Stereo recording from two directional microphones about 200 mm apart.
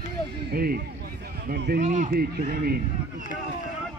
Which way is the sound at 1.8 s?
40° right (ahead or behind).